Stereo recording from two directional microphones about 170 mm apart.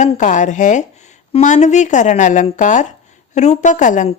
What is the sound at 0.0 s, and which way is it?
Speech, 45° left (ahead or behind).